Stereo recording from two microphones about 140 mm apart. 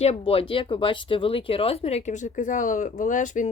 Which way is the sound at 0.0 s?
45° left (ahead or behind).